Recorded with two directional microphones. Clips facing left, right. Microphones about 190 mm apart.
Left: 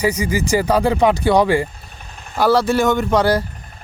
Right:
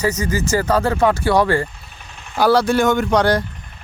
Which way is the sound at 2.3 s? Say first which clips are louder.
Even; centre (ahead or behind).